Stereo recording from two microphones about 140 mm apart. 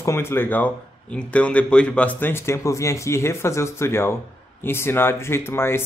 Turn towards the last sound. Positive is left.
turn(degrees=15)  # may be behind; listen again after turning